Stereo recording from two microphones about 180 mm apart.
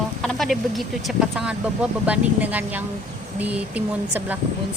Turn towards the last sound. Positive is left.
turn(degrees=-10)  # may be behind; listen again after turning